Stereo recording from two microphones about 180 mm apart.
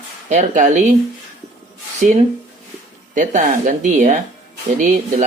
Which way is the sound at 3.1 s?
45° right (ahead or behind).